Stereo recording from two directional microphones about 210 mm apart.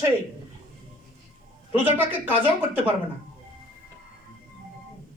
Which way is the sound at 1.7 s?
10° right (ahead or behind).